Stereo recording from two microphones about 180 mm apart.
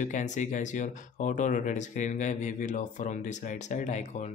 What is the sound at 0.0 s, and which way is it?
Speech, 45° left (ahead or behind).